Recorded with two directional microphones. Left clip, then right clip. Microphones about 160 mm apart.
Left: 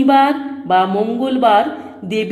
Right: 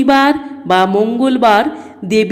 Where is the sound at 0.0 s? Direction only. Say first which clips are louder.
Right 1 dB; 20° right (ahead or behind).